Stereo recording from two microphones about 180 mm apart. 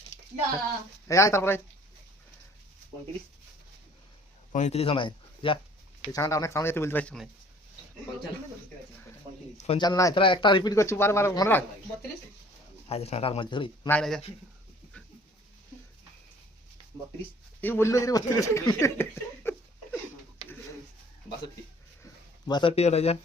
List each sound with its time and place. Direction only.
1.0 s speech: 15° left (ahead or behind)
4.5 s speech: 40° left (ahead or behind); by 7.3 s 5° left (ahead or behind)
9.6 s speech: 35° left (ahead or behind)
9.8 s speech: 20° left (ahead or behind)
12.9 s speech: 35° left (ahead or behind)
13.8 s speech: 5° left (ahead or behind)
14.9 s a sound: 5° left (ahead or behind)
17.6 s speech: 10° left (ahead or behind)
22.0 s a sound: 25° left (ahead or behind)